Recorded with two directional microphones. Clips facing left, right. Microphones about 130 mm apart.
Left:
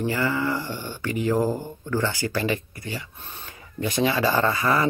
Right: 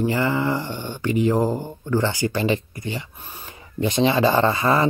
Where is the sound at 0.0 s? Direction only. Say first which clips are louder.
Right 3 dB; 20° right (ahead or behind).